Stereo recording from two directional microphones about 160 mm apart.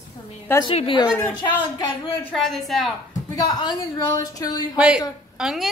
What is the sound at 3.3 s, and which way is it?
A woman's voice, 25° left (ahead or behind).